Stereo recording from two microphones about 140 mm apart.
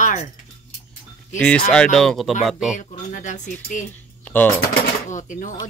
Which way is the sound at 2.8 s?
60° left (ahead or behind).